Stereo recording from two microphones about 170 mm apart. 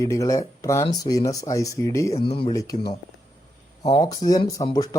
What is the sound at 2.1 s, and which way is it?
Speech, 30° left (ahead or behind).